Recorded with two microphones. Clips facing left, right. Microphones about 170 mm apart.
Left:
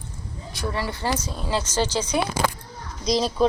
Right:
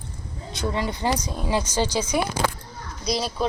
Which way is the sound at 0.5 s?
20° right (ahead or behind).